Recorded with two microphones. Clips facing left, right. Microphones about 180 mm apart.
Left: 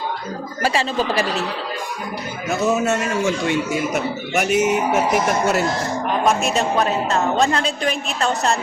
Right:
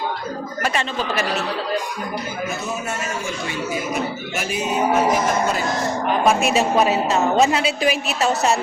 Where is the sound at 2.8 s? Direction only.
75° left (ahead or behind).